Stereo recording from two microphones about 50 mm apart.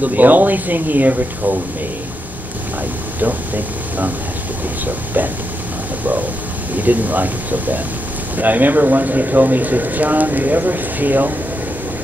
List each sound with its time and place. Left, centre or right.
0.0 s speech: right
3.2 s speech: right
6.8 s speech: right